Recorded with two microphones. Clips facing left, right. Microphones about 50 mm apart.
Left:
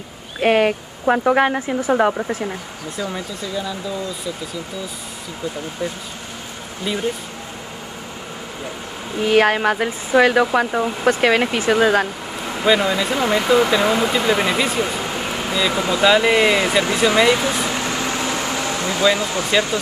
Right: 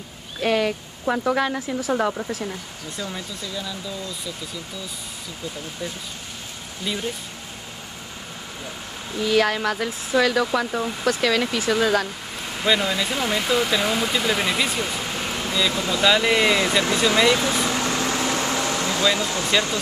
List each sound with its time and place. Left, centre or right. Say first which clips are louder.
0.4 s speech: left 6 dB; left
3.0 s speech: left 5 dB; centre
6.8 s speech: left 4 dB; centre
9.2 s speech: left 5 dB; left
12.6 s speech: left 5 dB; centre
17.6 s air conditioning: left 1 dB; left